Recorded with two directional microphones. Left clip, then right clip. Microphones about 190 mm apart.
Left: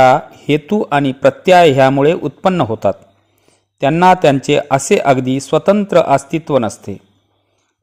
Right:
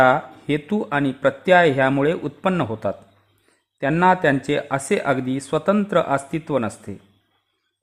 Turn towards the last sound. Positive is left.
turn(degrees=25)  # may be behind; listen again after turning